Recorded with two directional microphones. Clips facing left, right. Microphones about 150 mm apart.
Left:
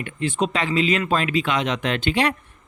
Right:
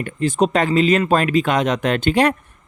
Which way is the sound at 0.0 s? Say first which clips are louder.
Right 5 dB; 40° right (ahead or behind).